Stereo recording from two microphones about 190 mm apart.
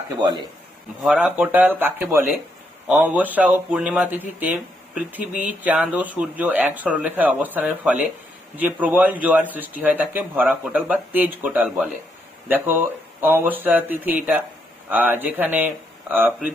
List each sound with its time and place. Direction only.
0.2 s speech: 20° right (ahead or behind)
1.0 s speech: 5° right (ahead or behind)